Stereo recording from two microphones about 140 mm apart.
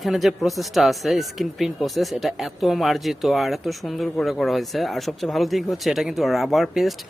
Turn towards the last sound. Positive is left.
turn(degrees=0)  # may be behind; listen again after turning